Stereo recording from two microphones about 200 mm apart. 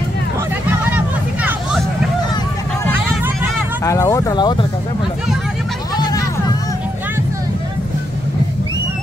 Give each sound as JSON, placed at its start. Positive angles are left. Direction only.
{"t": 0.9, "sound": "vehicle", "side_deg": -5}
{"t": 3.8, "sound": "speech", "side_deg": 15}